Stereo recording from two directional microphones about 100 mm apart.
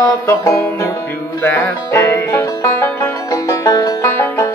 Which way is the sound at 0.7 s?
35° left (ahead or behind).